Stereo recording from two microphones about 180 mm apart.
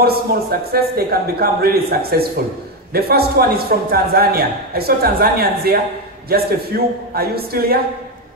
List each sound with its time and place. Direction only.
0.0 s a man's voice: 60° right (ahead or behind)